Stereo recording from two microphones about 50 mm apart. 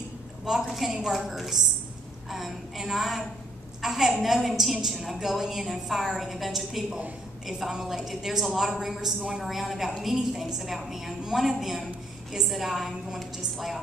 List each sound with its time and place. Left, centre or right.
0.7 s a woman's voice: centre